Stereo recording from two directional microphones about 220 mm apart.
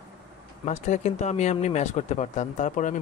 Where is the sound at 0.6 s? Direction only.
30° left (ahead or behind).